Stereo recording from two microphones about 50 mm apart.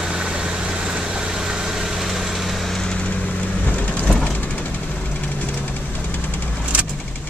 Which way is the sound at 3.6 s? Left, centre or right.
Left.